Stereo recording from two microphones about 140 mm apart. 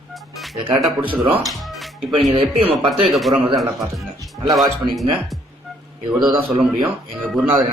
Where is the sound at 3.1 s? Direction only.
Centre (ahead or behind).